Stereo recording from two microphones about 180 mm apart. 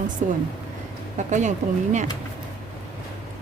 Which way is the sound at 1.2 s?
40° right (ahead or behind).